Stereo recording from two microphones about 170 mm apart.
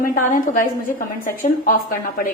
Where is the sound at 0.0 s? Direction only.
50° left (ahead or behind).